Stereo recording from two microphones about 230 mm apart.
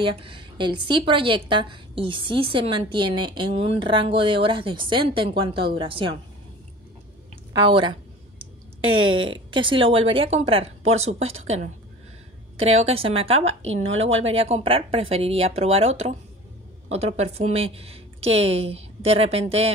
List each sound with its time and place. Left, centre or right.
0.0 s a woman's voice: right
7.5 s a woman's voice: right
9.1 s a woman's voice: right